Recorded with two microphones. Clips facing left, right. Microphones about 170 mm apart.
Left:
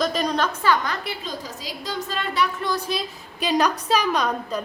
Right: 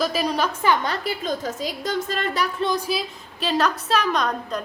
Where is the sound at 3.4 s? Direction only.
15° left (ahead or behind).